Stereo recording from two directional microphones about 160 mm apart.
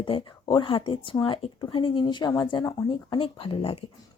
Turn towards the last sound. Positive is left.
turn(degrees=35)  # may be behind; listen again after turning